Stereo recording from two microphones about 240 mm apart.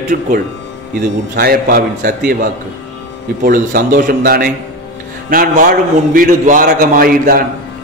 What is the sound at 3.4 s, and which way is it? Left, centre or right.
A man's voice, right.